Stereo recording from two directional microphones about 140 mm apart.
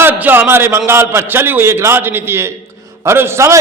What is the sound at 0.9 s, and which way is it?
A man's voice, 20° right (ahead or behind).